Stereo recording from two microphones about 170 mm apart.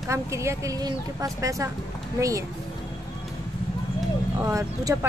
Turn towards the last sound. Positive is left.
turn(degrees=-20)  # may be behind; listen again after turning